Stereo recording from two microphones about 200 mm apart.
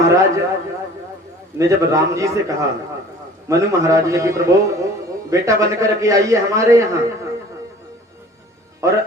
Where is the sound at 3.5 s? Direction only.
15° right (ahead or behind).